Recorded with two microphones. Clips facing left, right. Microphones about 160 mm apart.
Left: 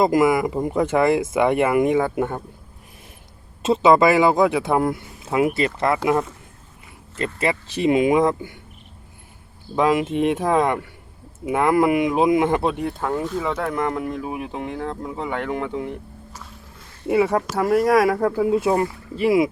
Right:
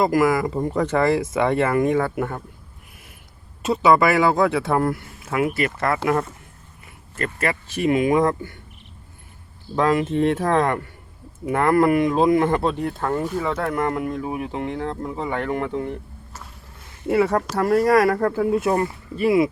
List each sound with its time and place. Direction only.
0.0 s speech: 20° left (ahead or behind)
3.6 s speech: 25° left (ahead or behind)
7.2 s speech: 20° left (ahead or behind)
9.7 s speech: 15° left (ahead or behind); by 14.1 s 5° right (ahead or behind)
14.1 s speech: 15° left (ahead or behind)
17.1 s speech: 10° left (ahead or behind)